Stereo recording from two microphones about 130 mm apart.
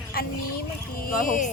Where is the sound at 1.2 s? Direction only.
90° left.